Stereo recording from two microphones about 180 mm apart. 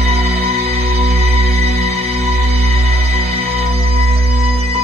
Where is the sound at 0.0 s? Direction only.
35° right (ahead or behind).